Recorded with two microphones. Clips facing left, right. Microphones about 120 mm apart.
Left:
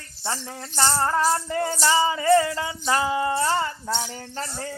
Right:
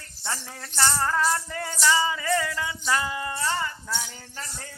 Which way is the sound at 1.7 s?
45° left (ahead or behind).